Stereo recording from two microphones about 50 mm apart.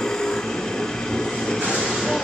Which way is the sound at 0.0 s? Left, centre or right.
Centre.